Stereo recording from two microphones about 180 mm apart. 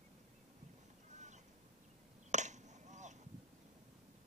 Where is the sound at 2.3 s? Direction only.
40° right (ahead or behind).